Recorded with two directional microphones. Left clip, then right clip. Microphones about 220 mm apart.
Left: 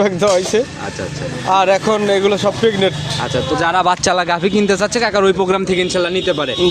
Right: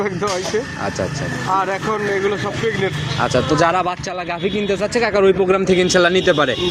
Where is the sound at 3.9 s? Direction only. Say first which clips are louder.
Left 9 dB; 40° left (ahead or behind).